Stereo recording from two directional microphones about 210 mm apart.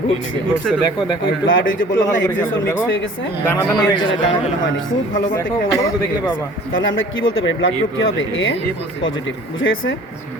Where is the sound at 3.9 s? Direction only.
25° left (ahead or behind).